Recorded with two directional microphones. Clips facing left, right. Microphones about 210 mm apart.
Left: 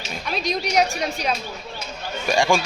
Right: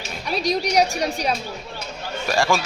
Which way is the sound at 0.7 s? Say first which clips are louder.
Left 1 dB; 35° right (ahead or behind).